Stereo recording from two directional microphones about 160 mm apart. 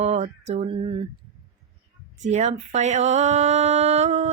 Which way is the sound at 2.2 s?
45° right (ahead or behind).